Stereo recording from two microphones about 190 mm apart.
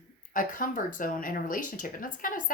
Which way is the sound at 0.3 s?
45° left (ahead or behind).